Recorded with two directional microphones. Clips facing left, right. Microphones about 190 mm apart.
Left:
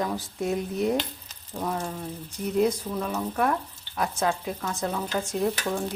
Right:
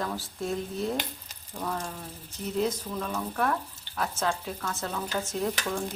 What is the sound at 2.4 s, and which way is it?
Speech, 10° left (ahead or behind).